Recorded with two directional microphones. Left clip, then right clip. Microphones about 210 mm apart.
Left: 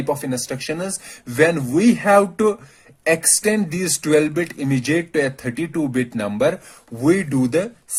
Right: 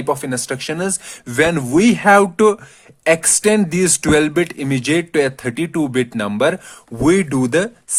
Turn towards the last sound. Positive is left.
turn(degrees=-50)  # may be behind; listen again after turning